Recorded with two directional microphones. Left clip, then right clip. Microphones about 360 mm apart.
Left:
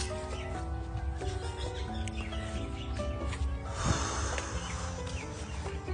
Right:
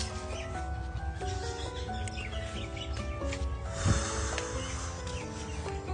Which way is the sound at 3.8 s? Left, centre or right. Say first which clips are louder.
Even; centre.